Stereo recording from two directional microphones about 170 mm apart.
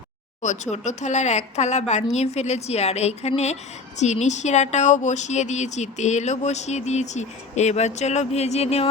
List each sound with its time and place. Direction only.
0.4 s speech: 45° left (ahead or behind)